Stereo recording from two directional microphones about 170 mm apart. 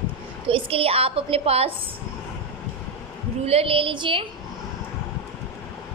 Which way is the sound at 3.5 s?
35° right (ahead or behind).